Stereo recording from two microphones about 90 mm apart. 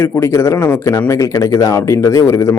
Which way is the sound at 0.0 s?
30° left (ahead or behind).